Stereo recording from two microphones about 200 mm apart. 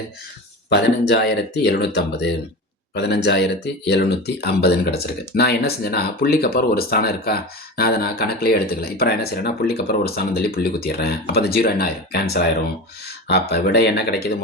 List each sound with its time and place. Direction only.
0.7 s speech: 55° left (ahead or behind)